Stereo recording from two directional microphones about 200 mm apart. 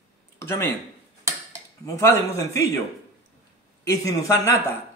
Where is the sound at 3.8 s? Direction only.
15° left (ahead or behind).